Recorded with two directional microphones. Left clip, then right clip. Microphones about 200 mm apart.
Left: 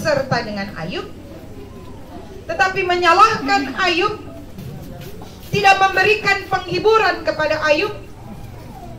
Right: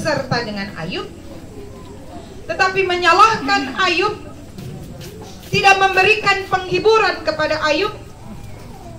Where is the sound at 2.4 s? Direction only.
5° left (ahead or behind).